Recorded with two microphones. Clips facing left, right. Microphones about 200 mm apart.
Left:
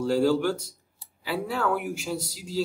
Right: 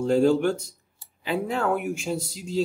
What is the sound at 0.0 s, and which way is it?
Speech, 20° right (ahead or behind).